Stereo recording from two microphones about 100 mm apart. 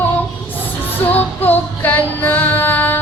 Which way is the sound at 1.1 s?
20° left (ahead or behind).